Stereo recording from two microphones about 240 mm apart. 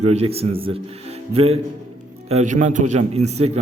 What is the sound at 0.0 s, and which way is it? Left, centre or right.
A man's voice, right.